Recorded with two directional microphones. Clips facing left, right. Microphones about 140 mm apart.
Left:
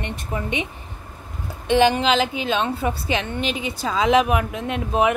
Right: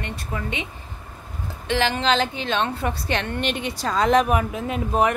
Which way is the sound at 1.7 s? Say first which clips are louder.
Left 4 dB; 15° left (ahead or behind).